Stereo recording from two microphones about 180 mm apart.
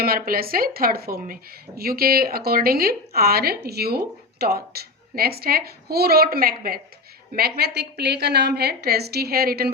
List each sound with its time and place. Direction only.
0.0 s speech: 55° right (ahead or behind)